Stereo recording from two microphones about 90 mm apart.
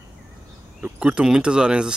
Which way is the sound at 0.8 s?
10° right (ahead or behind).